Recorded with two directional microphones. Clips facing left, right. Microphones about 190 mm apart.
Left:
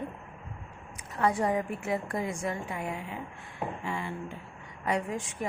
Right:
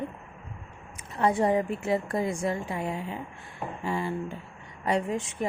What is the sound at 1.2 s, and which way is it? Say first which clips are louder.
A woman's voice: right 3 dB; 25° right (ahead or behind).